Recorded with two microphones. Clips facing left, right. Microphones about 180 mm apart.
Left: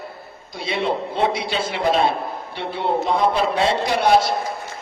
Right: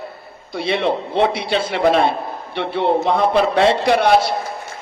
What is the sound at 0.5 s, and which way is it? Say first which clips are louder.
A man's voice: right 4 dB; 60° right (ahead or behind).